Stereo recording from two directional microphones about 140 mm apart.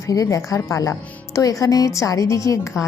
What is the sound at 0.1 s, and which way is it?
Speech, 25° left (ahead or behind).